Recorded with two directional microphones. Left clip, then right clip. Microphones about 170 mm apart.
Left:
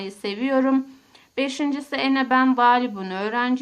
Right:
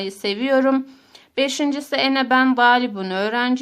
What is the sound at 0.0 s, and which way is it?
A woman's voice, 30° right (ahead or behind).